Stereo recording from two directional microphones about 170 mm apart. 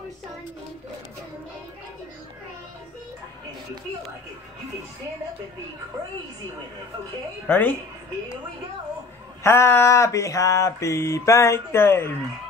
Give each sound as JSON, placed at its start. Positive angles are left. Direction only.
{"t": 7.4, "sound": "mantra", "side_deg": 10}
{"t": 9.4, "sound": "mantra", "side_deg": 15}